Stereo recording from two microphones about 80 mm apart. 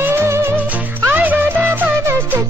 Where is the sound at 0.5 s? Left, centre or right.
Right.